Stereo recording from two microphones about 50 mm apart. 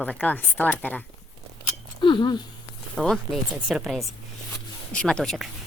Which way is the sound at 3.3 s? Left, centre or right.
Centre.